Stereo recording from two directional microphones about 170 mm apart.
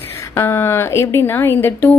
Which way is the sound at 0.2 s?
15° left (ahead or behind).